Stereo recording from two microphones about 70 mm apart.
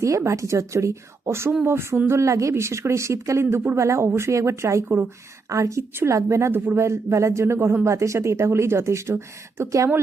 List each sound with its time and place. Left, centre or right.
0.0 s speech: right